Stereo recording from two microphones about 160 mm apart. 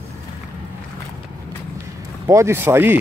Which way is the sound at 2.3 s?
15° right (ahead or behind).